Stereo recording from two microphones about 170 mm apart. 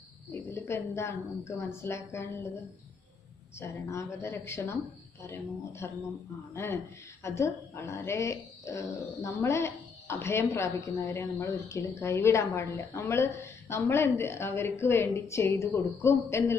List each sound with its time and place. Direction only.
0.3 s a woman's voice: 15° left (ahead or behind)